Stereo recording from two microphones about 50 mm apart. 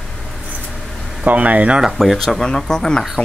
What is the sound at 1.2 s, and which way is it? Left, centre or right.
Speech, right.